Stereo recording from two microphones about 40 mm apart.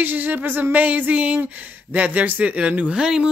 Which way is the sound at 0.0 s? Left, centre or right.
Right.